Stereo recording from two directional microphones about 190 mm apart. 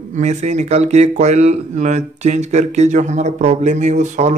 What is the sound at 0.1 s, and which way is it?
Speech, 35° right (ahead or behind).